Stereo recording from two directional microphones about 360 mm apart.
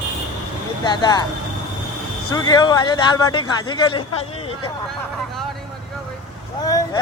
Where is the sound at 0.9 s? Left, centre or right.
Centre.